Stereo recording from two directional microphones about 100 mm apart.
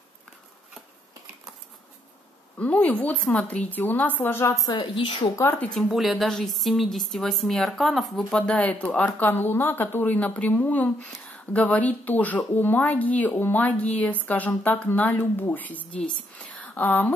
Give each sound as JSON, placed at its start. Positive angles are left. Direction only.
{"t": 2.6, "sound": "speech", "side_deg": 15}
{"t": 4.6, "sound": "a woman's voice", "side_deg": 55}
{"t": 5.3, "sound": "speech", "side_deg": 25}
{"t": 5.7, "sound": "speech", "side_deg": 5}